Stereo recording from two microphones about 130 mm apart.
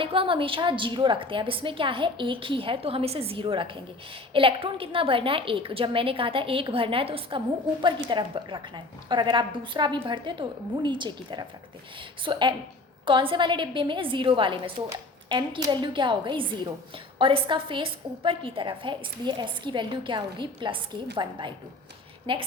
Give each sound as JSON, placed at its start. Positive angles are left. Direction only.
{"t": 0.0, "sound": "a woman's voice", "side_deg": -45}